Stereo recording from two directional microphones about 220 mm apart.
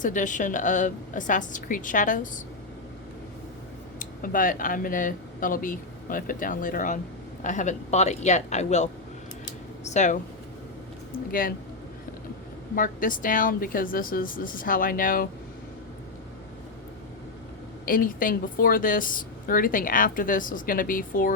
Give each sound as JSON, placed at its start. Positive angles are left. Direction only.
{"t": 0.0, "sound": "speech", "side_deg": 35}
{"t": 4.0, "sound": "speech", "side_deg": 40}
{"t": 11.3, "sound": "speech", "side_deg": 40}
{"t": 12.7, "sound": "speech", "side_deg": 40}
{"t": 17.8, "sound": "speech", "side_deg": 40}